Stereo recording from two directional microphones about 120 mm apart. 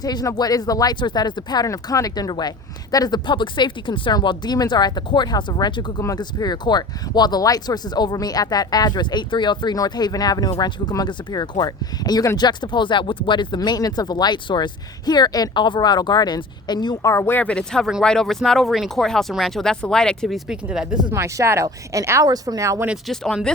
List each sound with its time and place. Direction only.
0.0 s speech: 35° left (ahead or behind); by 21.0 s 5° right (ahead or behind)
21.1 s speech: 25° right (ahead or behind)
23.0 s speech: 5° left (ahead or behind)